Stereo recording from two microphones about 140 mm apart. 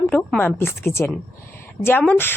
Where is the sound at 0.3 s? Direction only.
15° left (ahead or behind).